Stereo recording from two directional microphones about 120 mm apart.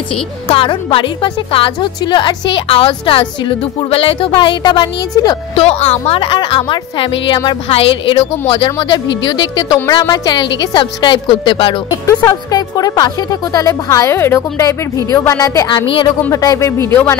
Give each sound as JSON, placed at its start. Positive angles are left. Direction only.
{"t": 0.5, "sound": "a woman's voice", "side_deg": 45}
{"t": 5.6, "sound": "a woman's voice", "side_deg": 60}
{"t": 8.7, "sound": "a woman's voice", "side_deg": 35}
{"t": 12.1, "sound": "speech", "side_deg": 30}